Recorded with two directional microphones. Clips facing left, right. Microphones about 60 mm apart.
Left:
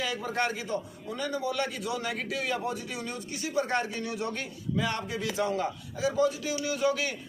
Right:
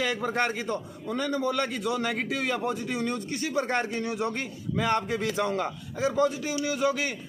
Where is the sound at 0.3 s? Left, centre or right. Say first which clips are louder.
Right 2 dB; right.